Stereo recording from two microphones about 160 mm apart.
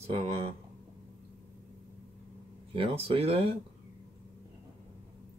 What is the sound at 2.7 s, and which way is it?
Speech, 35° right (ahead or behind).